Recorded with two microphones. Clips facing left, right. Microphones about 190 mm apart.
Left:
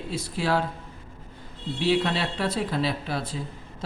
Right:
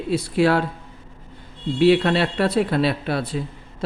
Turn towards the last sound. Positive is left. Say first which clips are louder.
# right 6 dB
turn(degrees=-65)  # may be behind; listen again after turning